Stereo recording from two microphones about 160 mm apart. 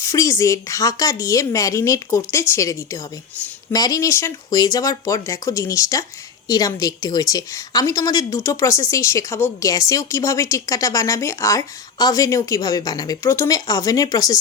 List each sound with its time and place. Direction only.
0.0 s speech: 20° left (ahead or behind)